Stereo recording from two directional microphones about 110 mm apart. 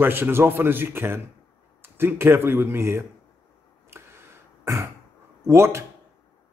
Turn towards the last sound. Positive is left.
turn(degrees=-25)  # may be behind; listen again after turning